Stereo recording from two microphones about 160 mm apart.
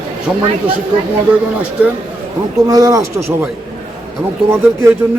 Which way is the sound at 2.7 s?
20° right (ahead or behind).